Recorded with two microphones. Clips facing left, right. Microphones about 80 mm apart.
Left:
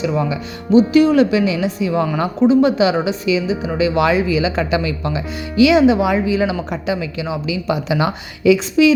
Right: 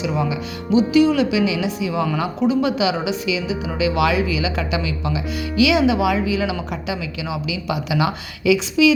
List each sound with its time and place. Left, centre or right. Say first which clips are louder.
0.0 s speech: left 3 dB; left